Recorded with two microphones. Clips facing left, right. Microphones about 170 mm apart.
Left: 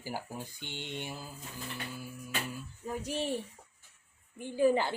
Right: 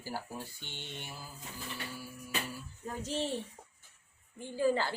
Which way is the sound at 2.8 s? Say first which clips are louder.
Left 1 dB; 10° left (ahead or behind).